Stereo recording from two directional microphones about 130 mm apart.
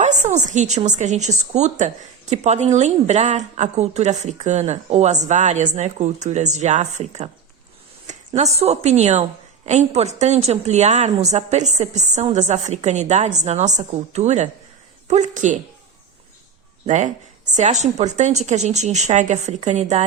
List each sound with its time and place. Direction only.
0.0 s a woman's voice: 65° right (ahead or behind)
8.4 s a woman's voice: 55° right (ahead or behind)
16.8 s a woman's voice: 65° right (ahead or behind)